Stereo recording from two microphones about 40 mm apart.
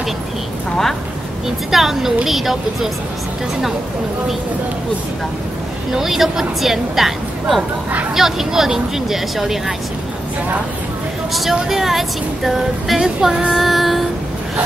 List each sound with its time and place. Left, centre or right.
1.7 s speech: centre
5.9 s speech: centre
11.7 s speech: centre
13.0 s speech: centre
13.5 s child singing: centre